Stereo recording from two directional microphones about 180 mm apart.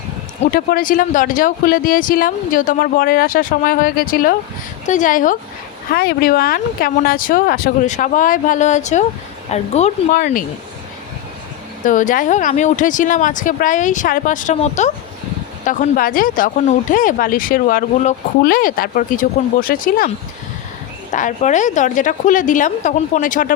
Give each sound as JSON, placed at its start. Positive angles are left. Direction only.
{"t": 0.5, "sound": "speech", "side_deg": 50}
{"t": 5.9, "sound": "speech", "side_deg": 60}
{"t": 11.9, "sound": "speech", "side_deg": 45}
{"t": 21.1, "sound": "speech", "side_deg": 45}